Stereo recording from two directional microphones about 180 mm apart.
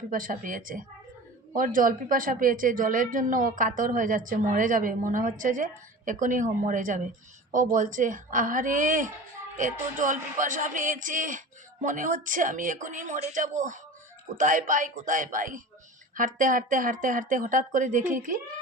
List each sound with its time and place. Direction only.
0.1 s a woman's voice: 50° right (ahead or behind)